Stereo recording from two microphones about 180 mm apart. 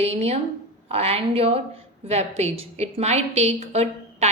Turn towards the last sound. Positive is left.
turn(degrees=-35)  # may be behind; listen again after turning